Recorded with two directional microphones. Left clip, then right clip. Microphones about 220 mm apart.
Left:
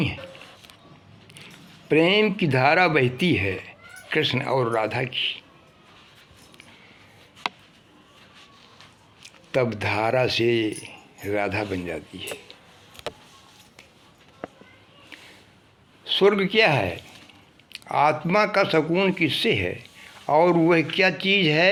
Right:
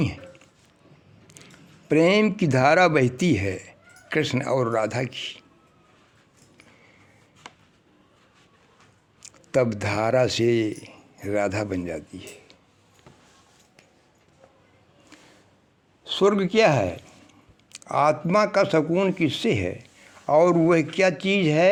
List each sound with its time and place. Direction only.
1.9 s speech: 55° right (ahead or behind)
9.9 s speech: 55° right (ahead or behind)
16.0 s speech: 45° right (ahead or behind)